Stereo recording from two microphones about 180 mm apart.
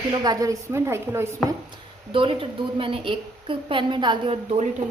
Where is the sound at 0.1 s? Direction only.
20° right (ahead or behind).